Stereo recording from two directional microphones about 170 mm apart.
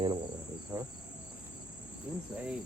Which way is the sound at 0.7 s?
15° right (ahead or behind).